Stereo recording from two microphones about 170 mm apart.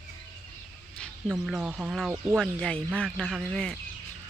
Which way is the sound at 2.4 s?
5° left (ahead or behind).